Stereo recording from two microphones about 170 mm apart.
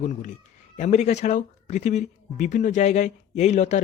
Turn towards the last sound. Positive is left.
turn(degrees=40)  # may be behind; listen again after turning